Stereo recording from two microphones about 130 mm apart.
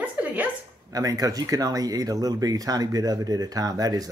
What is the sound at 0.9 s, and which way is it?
Speech, 30° right (ahead or behind).